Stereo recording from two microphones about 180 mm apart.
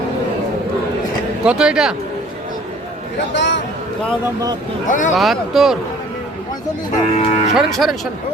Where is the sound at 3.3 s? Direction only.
85° left.